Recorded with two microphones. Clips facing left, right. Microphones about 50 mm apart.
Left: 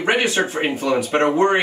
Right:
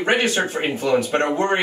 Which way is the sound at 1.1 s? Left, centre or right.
Left.